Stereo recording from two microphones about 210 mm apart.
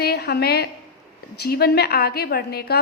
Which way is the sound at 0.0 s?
50° left (ahead or behind).